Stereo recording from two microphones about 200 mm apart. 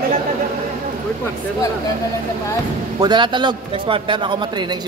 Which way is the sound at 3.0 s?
20° right (ahead or behind).